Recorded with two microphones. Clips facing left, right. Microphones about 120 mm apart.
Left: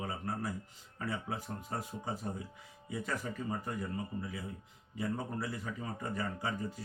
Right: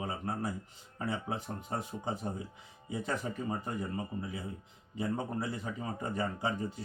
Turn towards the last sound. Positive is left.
turn(degrees=-25)  # may be behind; listen again after turning